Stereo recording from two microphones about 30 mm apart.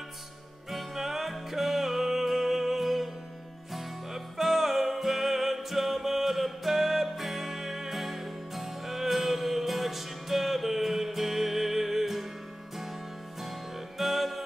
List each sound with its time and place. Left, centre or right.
0.7 s music: centre
13.4 s music: centre